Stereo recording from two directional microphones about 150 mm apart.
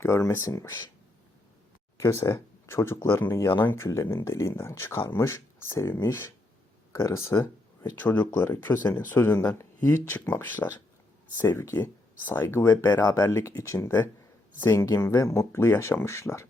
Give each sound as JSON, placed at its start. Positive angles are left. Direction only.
{"t": 0.0, "sound": "speech", "side_deg": 15}
{"t": 2.0, "sound": "speech", "side_deg": 20}